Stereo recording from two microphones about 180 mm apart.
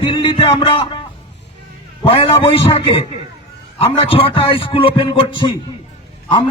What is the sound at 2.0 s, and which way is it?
A man's voice, 30° left (ahead or behind).